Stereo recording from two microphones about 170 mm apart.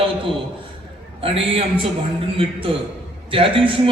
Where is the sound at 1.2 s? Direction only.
35° right (ahead or behind).